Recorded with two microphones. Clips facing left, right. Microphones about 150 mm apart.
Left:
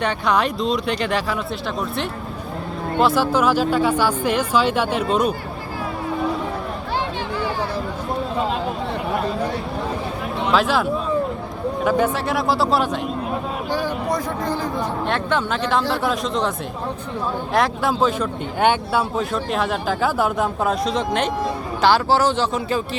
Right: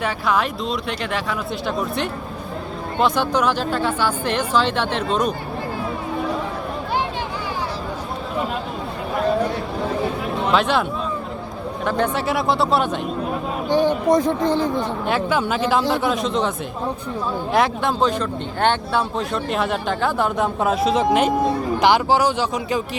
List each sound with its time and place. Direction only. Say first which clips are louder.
0.0 s speech: left 1 dB; centre (ahead or behind)
10.5 s speech: even; centre (ahead or behind)
11.9 s speech: left 1 dB; 5° left (ahead or behind)
13.7 s speech: right 8 dB; 20° right (ahead or behind)
14.8 s speech: right 1 dB; 5° right (ahead or behind)
17.5 s speech: right 1 dB; centre (ahead or behind)